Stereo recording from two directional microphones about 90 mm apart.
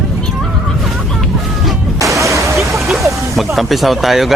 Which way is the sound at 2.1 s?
35° right (ahead or behind).